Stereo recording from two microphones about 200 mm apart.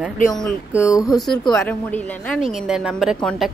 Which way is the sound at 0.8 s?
15° left (ahead or behind).